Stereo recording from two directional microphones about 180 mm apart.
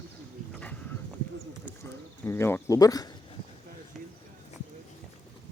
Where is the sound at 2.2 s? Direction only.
15° left (ahead or behind).